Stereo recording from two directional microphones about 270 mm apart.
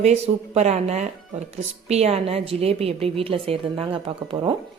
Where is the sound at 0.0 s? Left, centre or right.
Right.